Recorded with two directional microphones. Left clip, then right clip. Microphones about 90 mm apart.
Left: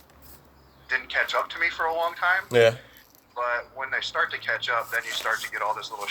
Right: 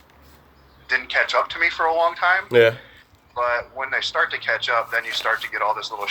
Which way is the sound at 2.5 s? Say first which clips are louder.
Right 3 dB; 10° left (ahead or behind).